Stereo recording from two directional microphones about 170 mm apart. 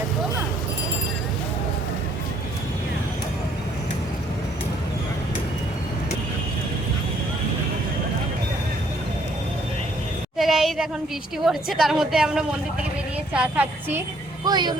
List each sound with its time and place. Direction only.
10.3 s a sound: centre (ahead or behind)
11.4 s a woman's voice: centre (ahead or behind)
14.4 s speech: 25° right (ahead or behind)